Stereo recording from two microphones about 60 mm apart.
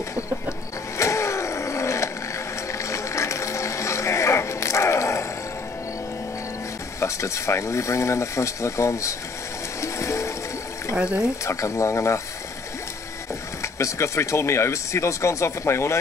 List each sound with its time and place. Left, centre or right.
0.9 s vehicle: left
7.0 s speech: left
9.8 s music: left
11.0 s speech: centre
11.4 s speech: left
13.6 s speech: left